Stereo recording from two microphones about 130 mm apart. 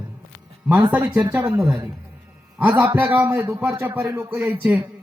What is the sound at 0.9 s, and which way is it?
A man's voice, 15° right (ahead or behind).